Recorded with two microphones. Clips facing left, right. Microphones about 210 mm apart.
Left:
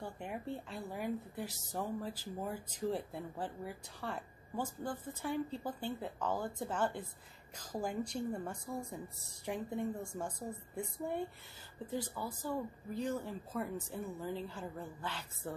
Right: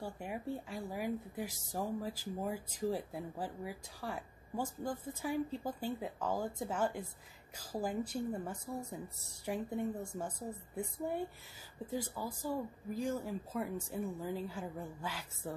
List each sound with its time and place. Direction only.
0.0 s a woman's voice: 5° right (ahead or behind)